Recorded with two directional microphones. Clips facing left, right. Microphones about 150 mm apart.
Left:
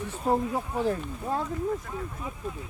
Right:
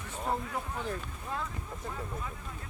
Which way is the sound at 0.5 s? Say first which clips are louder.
Left 8 dB; 35° left (ahead or behind).